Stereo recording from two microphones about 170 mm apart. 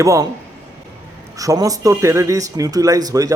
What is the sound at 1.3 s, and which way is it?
A man's voice, 20° right (ahead or behind).